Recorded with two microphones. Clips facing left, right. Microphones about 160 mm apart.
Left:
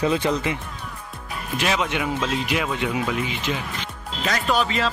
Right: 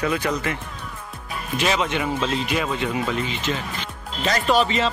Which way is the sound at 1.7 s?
5° left (ahead or behind).